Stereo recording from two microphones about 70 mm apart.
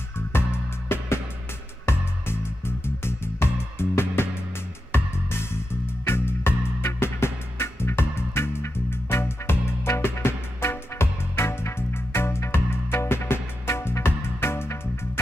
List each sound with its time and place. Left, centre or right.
0.8 s music: left